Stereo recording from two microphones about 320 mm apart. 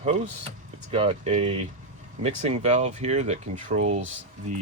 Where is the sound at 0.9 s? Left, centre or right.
Centre.